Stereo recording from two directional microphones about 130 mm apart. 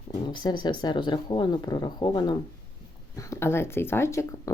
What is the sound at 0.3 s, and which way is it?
Speech, 35° left (ahead or behind).